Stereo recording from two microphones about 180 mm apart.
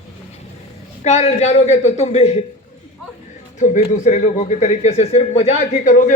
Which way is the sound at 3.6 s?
40° left (ahead or behind).